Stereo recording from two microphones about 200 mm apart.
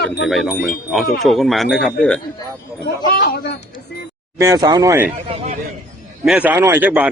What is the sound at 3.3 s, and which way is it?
Speech, 55° left (ahead or behind).